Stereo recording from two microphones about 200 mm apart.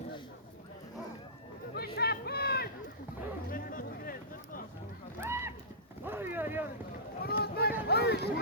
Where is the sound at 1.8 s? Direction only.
50° left (ahead or behind).